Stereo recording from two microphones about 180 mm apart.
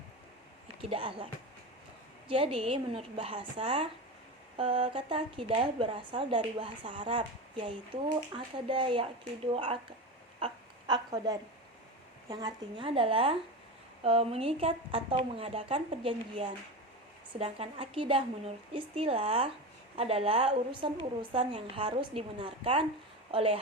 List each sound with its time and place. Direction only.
0.8 s a woman's voice: 30° right (ahead or behind)
10.4 s a sound: 25° right (ahead or behind)
12.3 s a woman's voice: 20° right (ahead or behind)